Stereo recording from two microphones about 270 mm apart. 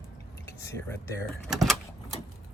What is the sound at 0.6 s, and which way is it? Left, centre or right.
Speech, centre.